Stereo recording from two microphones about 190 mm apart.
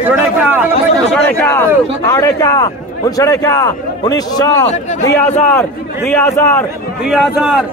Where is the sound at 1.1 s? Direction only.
10° left (ahead or behind).